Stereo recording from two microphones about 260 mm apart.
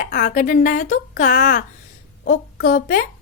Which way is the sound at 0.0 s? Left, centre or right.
Left.